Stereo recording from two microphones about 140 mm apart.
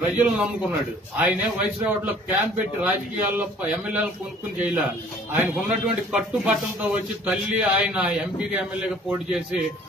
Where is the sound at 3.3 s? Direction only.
10° right (ahead or behind).